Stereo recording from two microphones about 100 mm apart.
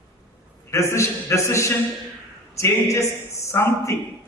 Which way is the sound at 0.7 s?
30° left (ahead or behind).